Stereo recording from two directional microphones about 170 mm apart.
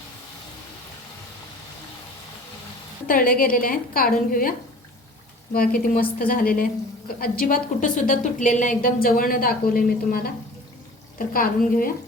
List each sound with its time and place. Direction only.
3.1 s a woman's voice: 55° left (ahead or behind)
5.5 s a woman's voice: 60° left (ahead or behind)